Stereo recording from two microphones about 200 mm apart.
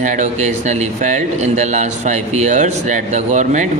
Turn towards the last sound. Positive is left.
turn(degrees=-35)  # may be behind; listen again after turning